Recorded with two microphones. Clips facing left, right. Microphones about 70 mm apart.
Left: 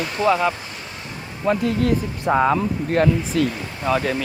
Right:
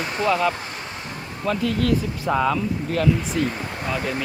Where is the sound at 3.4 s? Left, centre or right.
Left.